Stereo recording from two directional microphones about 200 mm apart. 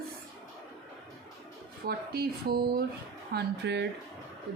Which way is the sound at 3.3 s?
60° right (ahead or behind).